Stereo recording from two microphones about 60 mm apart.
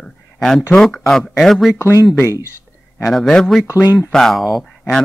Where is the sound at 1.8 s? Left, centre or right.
Left.